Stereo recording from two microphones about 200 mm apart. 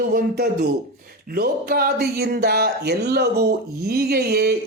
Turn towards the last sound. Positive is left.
turn(degrees=-55)  # may be behind; listen again after turning